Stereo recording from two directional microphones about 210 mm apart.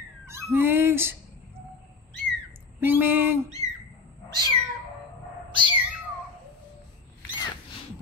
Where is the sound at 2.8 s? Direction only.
10° right (ahead or behind).